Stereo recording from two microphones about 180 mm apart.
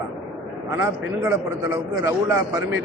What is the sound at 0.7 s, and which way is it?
A man's voice, 15° right (ahead or behind).